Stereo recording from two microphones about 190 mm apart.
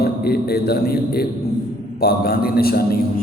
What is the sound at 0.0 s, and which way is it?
A man's voice, 55° left (ahead or behind).